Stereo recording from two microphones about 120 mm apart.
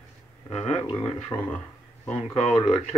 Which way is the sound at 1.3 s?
35° left (ahead or behind).